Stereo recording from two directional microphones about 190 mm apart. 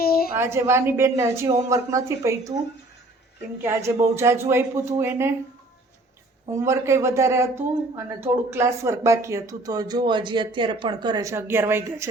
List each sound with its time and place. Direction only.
0.0 s a sound: 50° left (ahead or behind)
0.3 s speech: 15° right (ahead or behind)
3.6 s speech: 15° right (ahead or behind)
6.5 s speech: 15° right (ahead or behind)